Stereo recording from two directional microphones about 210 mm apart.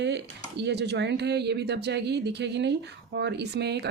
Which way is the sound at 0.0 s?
55° right (ahead or behind).